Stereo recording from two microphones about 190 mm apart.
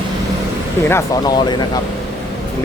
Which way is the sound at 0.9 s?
20° left (ahead or behind).